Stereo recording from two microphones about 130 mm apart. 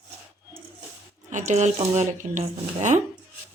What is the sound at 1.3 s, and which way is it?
Speech, 70° right (ahead or behind).